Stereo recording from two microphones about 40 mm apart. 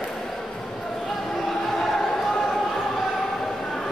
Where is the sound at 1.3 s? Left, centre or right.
Centre.